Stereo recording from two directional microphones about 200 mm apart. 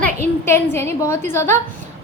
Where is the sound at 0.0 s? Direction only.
10° left (ahead or behind).